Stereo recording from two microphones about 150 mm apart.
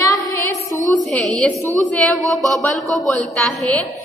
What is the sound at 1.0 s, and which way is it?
Speech, 5° left (ahead or behind).